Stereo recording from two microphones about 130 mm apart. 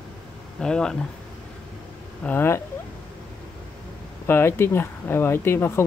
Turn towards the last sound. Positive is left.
turn(degrees=15)  # may be behind; listen again after turning